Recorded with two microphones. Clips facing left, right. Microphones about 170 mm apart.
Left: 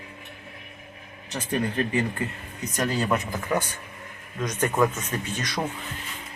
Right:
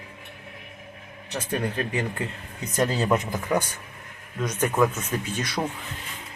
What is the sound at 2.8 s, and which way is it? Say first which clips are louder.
Speech: right 2 dB; 25° right (ahead or behind).